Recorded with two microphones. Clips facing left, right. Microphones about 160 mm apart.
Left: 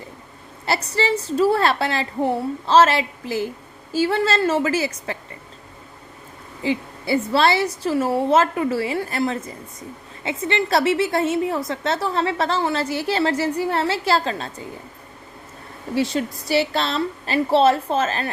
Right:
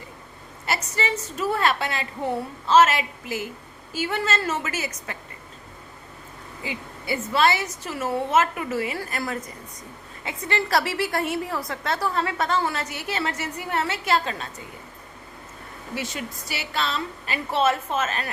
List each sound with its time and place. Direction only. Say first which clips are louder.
0.6 s a woman's voice: left 5 dB; 35° left (ahead or behind)
6.6 s a woman's voice: left 11 dB; 35° left (ahead or behind)
16.0 s a woman's voice: left 11 dB; 35° left (ahead or behind)